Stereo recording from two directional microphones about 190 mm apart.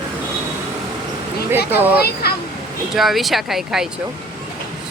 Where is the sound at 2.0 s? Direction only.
55° left (ahead or behind).